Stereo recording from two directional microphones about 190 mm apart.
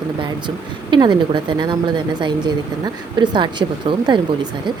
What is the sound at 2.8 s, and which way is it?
Speech, 25° right (ahead or behind).